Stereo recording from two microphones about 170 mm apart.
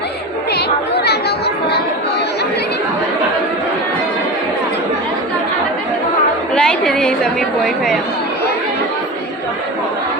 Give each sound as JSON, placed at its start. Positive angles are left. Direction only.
{"t": 0.5, "sound": "chatter", "side_deg": 75}
{"t": 6.5, "sound": "chatter", "side_deg": 5}